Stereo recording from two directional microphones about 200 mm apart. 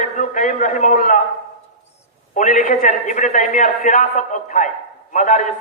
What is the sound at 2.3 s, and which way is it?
A man's voice, 40° left (ahead or behind).